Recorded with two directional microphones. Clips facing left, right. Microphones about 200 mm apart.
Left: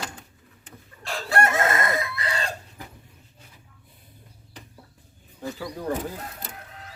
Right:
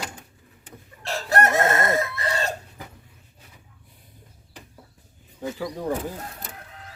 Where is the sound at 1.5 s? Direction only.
40° right (ahead or behind).